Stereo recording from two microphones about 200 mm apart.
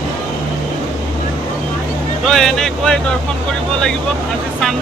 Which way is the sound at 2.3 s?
Centre (ahead or behind).